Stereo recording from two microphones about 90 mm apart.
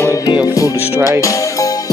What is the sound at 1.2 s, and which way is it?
Music, 35° left (ahead or behind).